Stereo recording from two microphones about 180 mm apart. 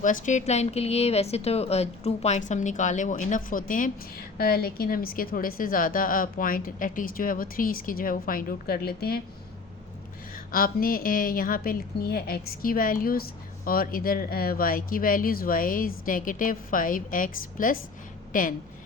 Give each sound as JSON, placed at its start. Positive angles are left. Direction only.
{"t": 0.0, "sound": "a woman's voice", "side_deg": 45}
{"t": 10.3, "sound": "a woman's voice", "side_deg": 50}